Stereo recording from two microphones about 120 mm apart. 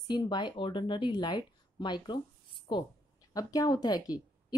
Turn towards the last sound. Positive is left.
turn(degrees=30)  # may be behind; listen again after turning